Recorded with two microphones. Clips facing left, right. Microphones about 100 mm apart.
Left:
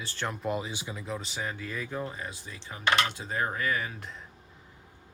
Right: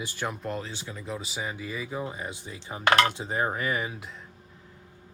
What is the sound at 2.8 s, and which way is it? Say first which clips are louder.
Dishes: right 5 dB; 55° right (ahead or behind).